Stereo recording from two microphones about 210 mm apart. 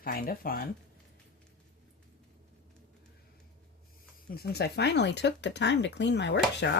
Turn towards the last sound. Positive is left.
turn(degrees=55)  # may be behind; listen again after turning